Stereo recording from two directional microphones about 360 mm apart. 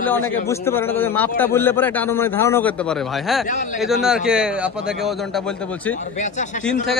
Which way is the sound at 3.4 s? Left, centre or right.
Left.